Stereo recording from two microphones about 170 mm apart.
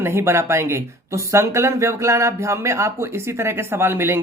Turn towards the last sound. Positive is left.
turn(degrees=-15)  # may be behind; listen again after turning